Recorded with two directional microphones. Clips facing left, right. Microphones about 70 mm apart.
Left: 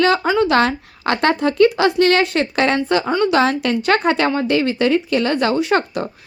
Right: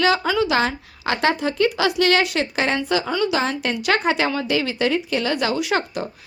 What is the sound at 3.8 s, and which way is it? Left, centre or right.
Speech, left.